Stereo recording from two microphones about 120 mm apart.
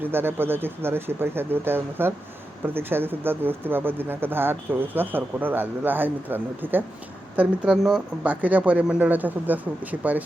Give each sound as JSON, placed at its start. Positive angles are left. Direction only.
{"t": 0.0, "sound": "speech", "side_deg": -20}